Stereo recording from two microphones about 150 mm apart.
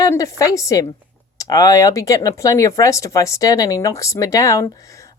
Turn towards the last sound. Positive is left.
turn(degrees=20)  # may be behind; listen again after turning